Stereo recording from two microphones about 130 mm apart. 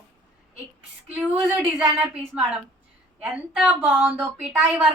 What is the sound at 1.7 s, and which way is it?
A woman's voice, 10° right (ahead or behind).